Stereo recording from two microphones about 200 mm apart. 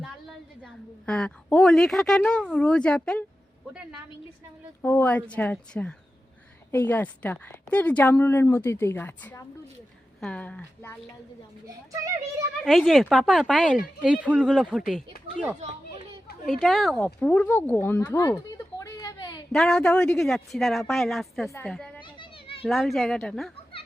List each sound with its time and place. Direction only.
0.6 s a woman's voice: 5° left (ahead or behind)
4.8 s a woman's voice: 10° left (ahead or behind)
11.6 s speech: 15° right (ahead or behind)
12.6 s a woman's voice: centre (ahead or behind)
16.5 s a woman's voice: centre (ahead or behind); by 19.4 s 20° left (ahead or behind)
19.5 s a woman's voice: 5° left (ahead or behind)
22.0 s children playing: 25° left (ahead or behind)
22.6 s a woman's voice: centre (ahead or behind)